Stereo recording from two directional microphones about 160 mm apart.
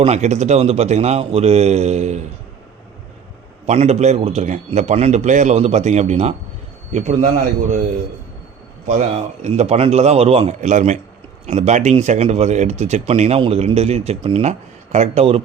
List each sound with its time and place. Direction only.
0.0 s a man's voice: 45° right (ahead or behind)
3.7 s a man's voice: 45° right (ahead or behind)
8.9 s a man's voice: 45° right (ahead or behind)